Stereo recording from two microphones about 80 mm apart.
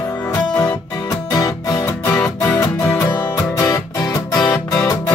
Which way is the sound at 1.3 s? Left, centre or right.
Left.